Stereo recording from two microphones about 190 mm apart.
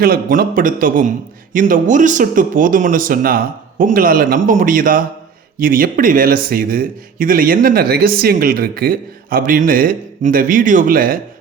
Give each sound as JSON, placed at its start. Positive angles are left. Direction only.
{"t": 0.0, "sound": "a man's voice", "side_deg": -50}